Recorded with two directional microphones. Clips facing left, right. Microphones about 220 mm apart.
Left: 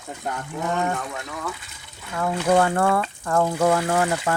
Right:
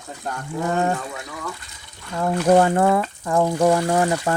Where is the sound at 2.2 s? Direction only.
25° right (ahead or behind).